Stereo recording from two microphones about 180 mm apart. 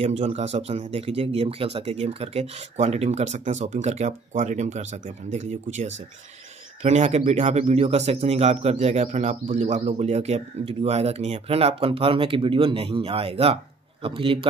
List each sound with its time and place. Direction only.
0.0 s a man's voice: 40° right (ahead or behind)